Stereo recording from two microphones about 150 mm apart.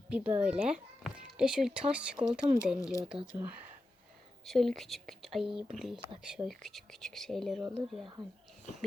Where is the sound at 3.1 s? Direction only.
35° right (ahead or behind).